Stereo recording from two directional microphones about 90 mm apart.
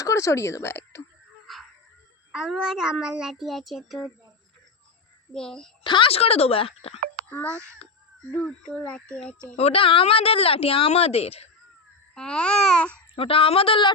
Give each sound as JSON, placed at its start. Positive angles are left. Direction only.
{"t": 0.0, "sound": "speech", "side_deg": 35}
{"t": 1.5, "sound": "dog", "side_deg": 0}
{"t": 2.3, "sound": "child singing", "side_deg": -5}
{"t": 5.3, "sound": "speech", "side_deg": 5}
{"t": 5.8, "sound": "a woman's voice", "side_deg": 70}
{"t": 7.5, "sound": "speech", "side_deg": -30}
{"t": 8.4, "sound": "speech", "side_deg": 15}
{"t": 9.6, "sound": "a woman's voice", "side_deg": 85}
{"t": 12.1, "sound": "speech", "side_deg": 10}
{"t": 13.1, "sound": "a woman's voice", "side_deg": 90}